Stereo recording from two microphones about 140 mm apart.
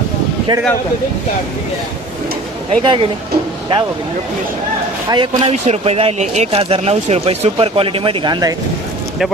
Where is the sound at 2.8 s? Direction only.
35° right (ahead or behind).